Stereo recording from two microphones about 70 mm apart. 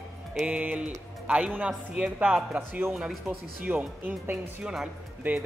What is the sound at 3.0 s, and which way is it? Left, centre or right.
Speech, centre.